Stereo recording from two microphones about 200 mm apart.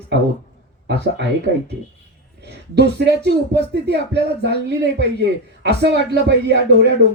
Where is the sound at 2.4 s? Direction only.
55° right (ahead or behind).